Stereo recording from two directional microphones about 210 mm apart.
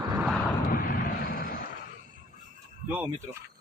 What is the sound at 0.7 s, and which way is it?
Vehicle, 40° left (ahead or behind).